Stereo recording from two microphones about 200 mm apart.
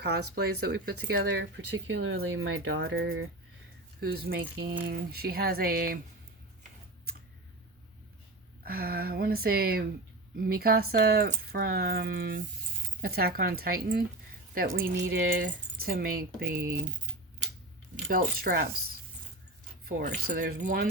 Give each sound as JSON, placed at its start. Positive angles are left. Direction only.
{"t": 0.0, "sound": "speech", "side_deg": -55}
{"t": 2.0, "sound": "speech", "side_deg": -90}
{"t": 4.0, "sound": "speech", "side_deg": -50}
{"t": 8.6, "sound": "speech", "side_deg": -50}
{"t": 17.9, "sound": "speech", "side_deg": -45}
{"t": 19.9, "sound": "speech", "side_deg": -45}